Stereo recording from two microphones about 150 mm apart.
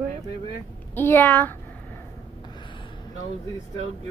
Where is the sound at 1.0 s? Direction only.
15° left (ahead or behind).